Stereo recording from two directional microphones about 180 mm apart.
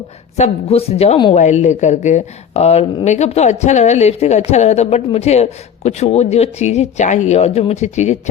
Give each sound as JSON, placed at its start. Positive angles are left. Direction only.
{"t": 0.3, "sound": "a woman's voice", "side_deg": 35}